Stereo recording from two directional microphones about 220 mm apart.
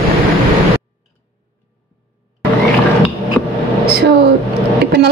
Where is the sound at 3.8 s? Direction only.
50° right (ahead or behind).